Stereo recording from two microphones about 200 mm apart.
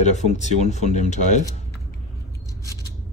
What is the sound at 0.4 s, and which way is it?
Speech, 35° left (ahead or behind).